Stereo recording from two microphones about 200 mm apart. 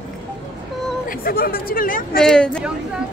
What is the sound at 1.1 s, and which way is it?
Speech, 45° left (ahead or behind).